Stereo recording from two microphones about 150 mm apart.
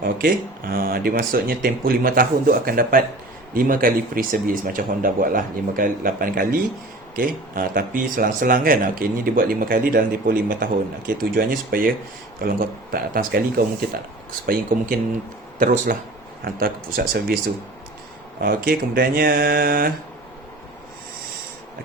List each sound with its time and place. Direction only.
0.0 s speech: 75° right (ahead or behind)
15.5 s speech: 65° right (ahead or behind)
16.4 s speech: 80° right
18.3 s speech: 75° right (ahead or behind)